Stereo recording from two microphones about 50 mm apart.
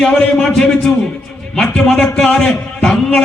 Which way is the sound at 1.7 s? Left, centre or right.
Left.